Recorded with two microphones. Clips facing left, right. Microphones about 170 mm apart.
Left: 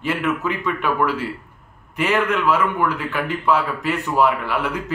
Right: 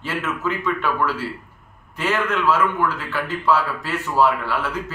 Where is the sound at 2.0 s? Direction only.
15° left (ahead or behind).